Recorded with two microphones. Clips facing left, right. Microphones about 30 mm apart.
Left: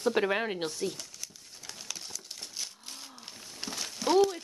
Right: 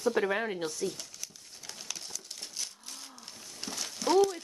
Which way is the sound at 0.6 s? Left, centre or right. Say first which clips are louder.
Left 1 dB; left.